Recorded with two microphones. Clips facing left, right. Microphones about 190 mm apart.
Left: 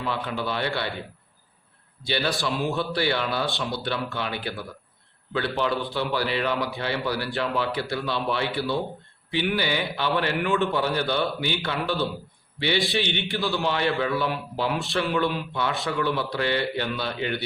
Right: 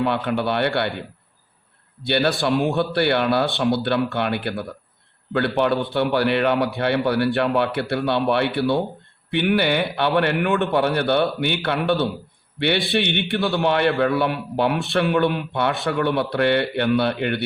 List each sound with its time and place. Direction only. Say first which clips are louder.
0.0 s a man's voice: right 7 dB; 60° right (ahead or behind)
2.0 s a man's voice: right 6 dB; 60° right (ahead or behind)